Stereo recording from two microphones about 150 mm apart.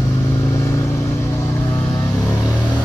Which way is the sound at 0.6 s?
20° left (ahead or behind).